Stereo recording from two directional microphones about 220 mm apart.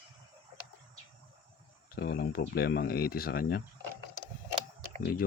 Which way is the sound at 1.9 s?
45° left (ahead or behind).